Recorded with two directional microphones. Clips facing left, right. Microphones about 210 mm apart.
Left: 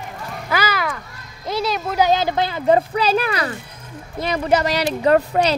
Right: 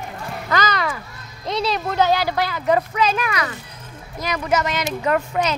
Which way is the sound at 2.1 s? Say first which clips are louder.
Left 2 dB; 20° left (ahead or behind).